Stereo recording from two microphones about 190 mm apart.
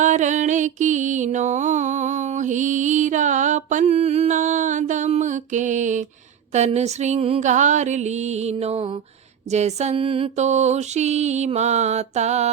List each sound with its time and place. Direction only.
0.0 s mantra: 40° right (ahead or behind)